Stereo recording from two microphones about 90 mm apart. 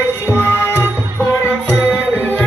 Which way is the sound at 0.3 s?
25° left (ahead or behind).